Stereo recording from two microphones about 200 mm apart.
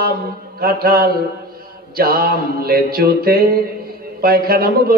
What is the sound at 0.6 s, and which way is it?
A man's voice, 50° right (ahead or behind).